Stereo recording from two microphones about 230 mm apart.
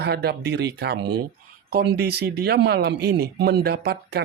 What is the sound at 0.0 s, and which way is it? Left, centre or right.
A man's voice, right.